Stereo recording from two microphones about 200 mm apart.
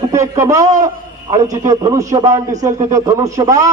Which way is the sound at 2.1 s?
30° right (ahead or behind).